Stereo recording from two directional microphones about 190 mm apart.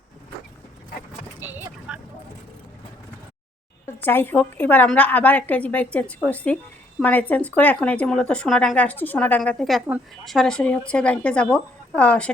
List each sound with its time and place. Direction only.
1.4 s vehicle: 10° right (ahead or behind)
4.0 s speech: 10° left (ahead or behind)